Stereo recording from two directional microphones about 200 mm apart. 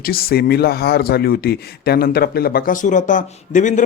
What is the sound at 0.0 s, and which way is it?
A man's voice, 50° left (ahead or behind).